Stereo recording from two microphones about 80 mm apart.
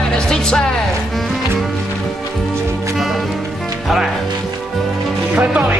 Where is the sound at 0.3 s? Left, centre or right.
Centre.